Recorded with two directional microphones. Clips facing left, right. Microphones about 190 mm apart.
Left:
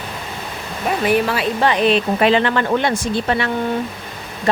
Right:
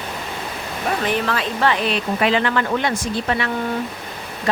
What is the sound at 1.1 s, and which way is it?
Speech, 10° left (ahead or behind).